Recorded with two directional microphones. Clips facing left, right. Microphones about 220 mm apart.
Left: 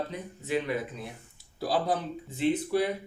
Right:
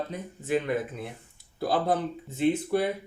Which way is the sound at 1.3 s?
55° right (ahead or behind).